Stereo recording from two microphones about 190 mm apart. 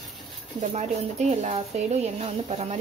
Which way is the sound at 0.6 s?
35° right (ahead or behind).